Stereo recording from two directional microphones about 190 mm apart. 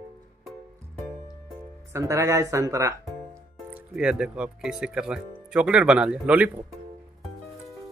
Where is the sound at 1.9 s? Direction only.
15° right (ahead or behind).